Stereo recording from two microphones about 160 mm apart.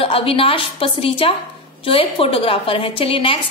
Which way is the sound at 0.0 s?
35° left (ahead or behind).